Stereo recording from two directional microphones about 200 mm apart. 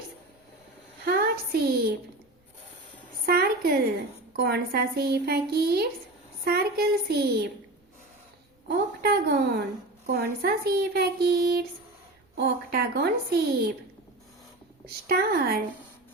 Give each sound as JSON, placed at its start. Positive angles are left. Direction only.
{"t": 1.0, "sound": "a woman's voice", "side_deg": -50}
{"t": 3.2, "sound": "a child's voice", "side_deg": -50}
{"t": 9.2, "sound": "a child's voice", "side_deg": -55}
{"t": 15.0, "sound": "a child's voice", "side_deg": -50}